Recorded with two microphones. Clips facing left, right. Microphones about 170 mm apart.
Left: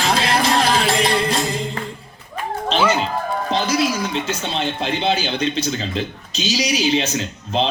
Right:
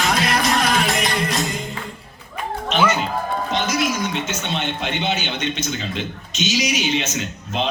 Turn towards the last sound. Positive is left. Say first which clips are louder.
# left 3 dB
turn(degrees=30)  # may be behind; listen again after turning